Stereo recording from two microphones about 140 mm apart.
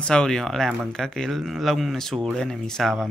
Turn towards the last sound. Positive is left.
turn(degrees=0)  # may be behind; listen again after turning